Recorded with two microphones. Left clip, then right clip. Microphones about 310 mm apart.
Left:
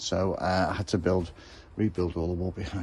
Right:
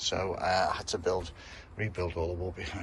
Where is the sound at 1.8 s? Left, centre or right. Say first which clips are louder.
Left 4 dB; centre.